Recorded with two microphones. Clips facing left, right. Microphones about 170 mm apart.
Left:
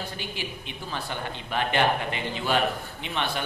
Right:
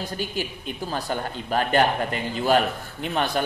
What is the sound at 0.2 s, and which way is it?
A man's voice, 40° right (ahead or behind).